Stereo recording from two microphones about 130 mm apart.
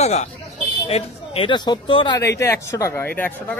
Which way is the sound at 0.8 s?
45° left (ahead or behind).